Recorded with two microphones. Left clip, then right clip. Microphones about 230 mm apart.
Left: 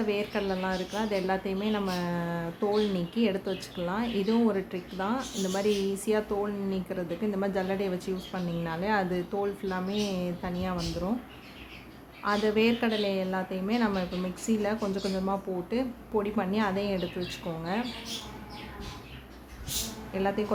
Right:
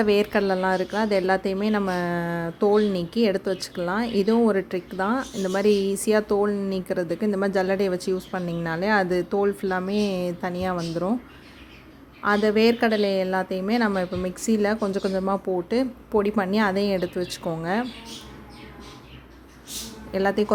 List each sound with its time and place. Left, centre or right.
0.0 s speech: right
12.2 s a woman's voice: right
20.1 s speech: right